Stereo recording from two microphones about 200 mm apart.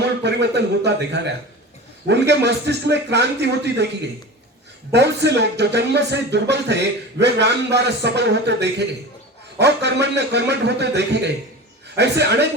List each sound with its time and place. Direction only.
0.2 s speech: 60° right (ahead or behind)
4.9 s speech: 55° right (ahead or behind)